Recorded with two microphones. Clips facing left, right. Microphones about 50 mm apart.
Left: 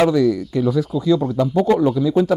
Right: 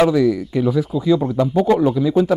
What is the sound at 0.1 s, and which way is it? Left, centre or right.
Speech, centre.